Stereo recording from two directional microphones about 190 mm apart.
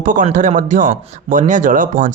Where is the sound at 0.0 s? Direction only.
45° right (ahead or behind).